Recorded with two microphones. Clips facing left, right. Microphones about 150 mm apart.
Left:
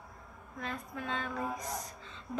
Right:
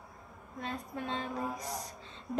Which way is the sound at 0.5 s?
30° right (ahead or behind).